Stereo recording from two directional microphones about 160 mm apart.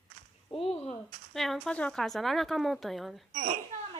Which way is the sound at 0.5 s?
40° left (ahead or behind).